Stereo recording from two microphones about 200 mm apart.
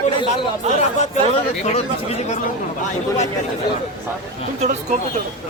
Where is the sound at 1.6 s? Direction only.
35° left (ahead or behind).